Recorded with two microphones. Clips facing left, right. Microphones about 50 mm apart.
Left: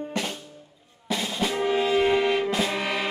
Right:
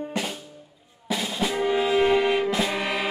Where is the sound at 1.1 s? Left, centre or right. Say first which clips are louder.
Even; centre.